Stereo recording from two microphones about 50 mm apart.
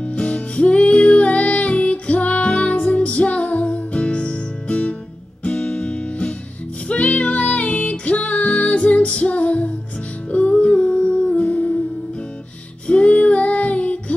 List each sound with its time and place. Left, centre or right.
0.0 s music: left
12.8 s female singing: left